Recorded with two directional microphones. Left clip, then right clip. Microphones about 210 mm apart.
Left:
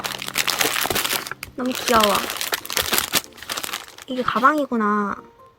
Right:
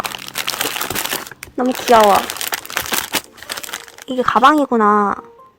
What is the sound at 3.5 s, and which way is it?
Speech, 20° right (ahead or behind).